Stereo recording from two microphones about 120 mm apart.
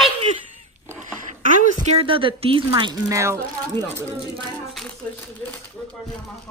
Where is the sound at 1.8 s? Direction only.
50° right (ahead or behind).